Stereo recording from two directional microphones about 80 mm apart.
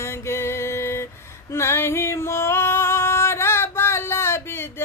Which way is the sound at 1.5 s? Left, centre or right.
Left.